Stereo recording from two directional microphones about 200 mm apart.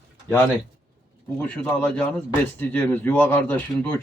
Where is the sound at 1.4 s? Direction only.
5° left (ahead or behind).